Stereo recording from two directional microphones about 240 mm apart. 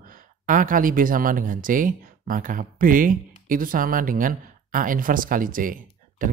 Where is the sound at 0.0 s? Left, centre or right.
Right.